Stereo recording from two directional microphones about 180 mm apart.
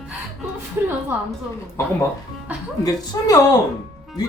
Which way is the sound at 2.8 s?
20° left (ahead or behind).